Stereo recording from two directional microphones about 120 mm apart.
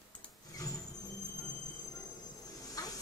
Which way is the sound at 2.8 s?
30° left (ahead or behind).